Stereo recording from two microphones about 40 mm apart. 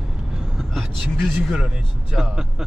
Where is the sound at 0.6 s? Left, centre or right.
Centre.